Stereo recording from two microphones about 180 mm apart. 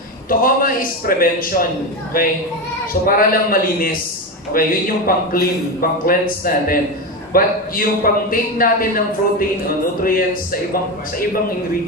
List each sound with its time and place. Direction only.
0.3 s a man's voice: 50° left (ahead or behind)